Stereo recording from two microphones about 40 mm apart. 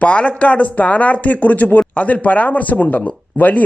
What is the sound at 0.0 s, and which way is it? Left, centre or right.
Speech, left.